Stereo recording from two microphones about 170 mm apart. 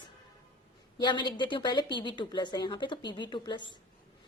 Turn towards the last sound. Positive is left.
turn(degrees=25)  # may be behind; listen again after turning